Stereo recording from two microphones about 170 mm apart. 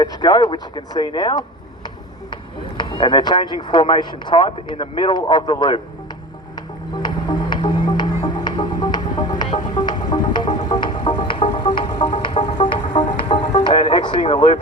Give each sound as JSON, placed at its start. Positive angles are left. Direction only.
{"t": 0.0, "sound": "speech", "side_deg": 25}
{"t": 6.9, "sound": "music", "side_deg": 25}
{"t": 8.2, "sound": "throbbing", "side_deg": 25}
{"t": 13.4, "sound": "music", "side_deg": 45}
{"t": 13.8, "sound": "a sound", "side_deg": 30}
{"t": 14.3, "sound": "speech", "side_deg": 35}